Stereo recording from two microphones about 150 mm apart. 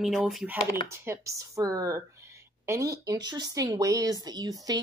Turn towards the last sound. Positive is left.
turn(degrees=-25)  # may be behind; listen again after turning